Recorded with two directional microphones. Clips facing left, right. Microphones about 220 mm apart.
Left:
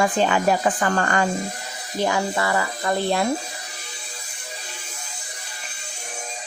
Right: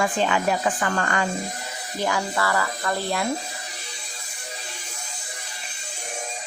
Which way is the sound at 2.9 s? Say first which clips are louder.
Left 5 dB; 30° left (ahead or behind).